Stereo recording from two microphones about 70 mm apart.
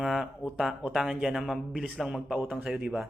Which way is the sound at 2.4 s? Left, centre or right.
Right.